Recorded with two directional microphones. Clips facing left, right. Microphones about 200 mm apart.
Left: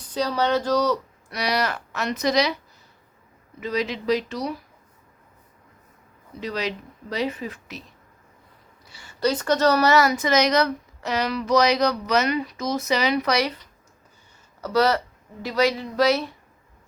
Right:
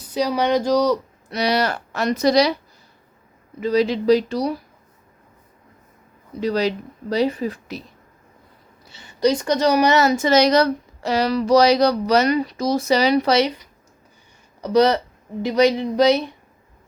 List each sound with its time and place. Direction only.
0.0 s speech: 10° right (ahead or behind)
1.3 s a woman's voice: 25° right (ahead or behind)
3.6 s a woman's voice: 35° right (ahead or behind)
6.4 s a woman's voice: 35° right (ahead or behind)
8.8 s a woman's voice: 25° right (ahead or behind)
14.6 s speech: 20° right (ahead or behind)